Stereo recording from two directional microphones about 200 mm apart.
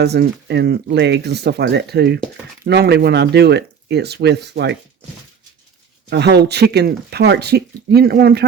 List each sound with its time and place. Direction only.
0.0 s speech: 55° right (ahead or behind)
6.1 s speech: 55° right (ahead or behind)